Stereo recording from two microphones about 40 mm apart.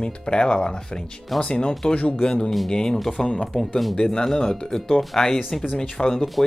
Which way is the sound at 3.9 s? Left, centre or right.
Centre.